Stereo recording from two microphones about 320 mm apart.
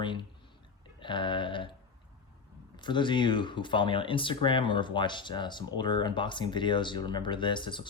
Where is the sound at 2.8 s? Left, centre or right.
Centre.